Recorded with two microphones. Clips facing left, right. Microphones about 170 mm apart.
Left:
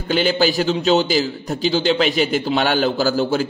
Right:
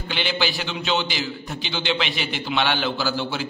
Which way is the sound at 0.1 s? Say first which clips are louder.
Left 9 dB; 40° left (ahead or behind).